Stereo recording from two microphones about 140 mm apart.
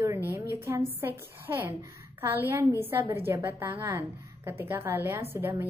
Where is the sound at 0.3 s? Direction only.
15° right (ahead or behind).